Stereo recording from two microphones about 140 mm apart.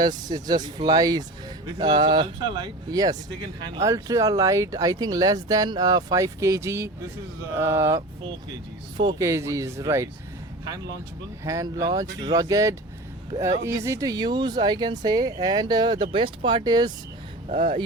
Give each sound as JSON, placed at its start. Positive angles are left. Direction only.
{"t": 0.3, "sound": "speech", "side_deg": -30}
{"t": 9.0, "sound": "speech", "side_deg": -30}
{"t": 9.2, "sound": "speech", "side_deg": -20}
{"t": 11.4, "sound": "speech", "side_deg": -25}